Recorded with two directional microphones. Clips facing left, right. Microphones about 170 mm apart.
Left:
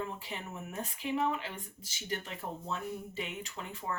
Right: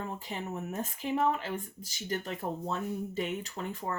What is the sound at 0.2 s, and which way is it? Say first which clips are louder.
Speech: right 5 dB; 45° right (ahead or behind).